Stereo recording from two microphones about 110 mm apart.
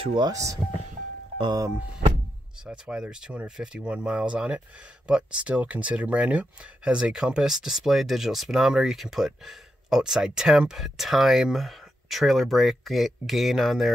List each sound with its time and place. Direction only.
0.0 s speech: 50° right (ahead or behind)
0.3 s speech: 30° right (ahead or behind)
2.6 s speech: 5° right (ahead or behind)